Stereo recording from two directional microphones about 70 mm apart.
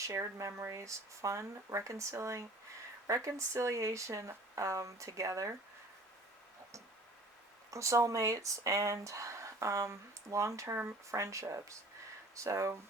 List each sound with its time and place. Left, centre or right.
0.0 s speech: right
7.7 s speech: right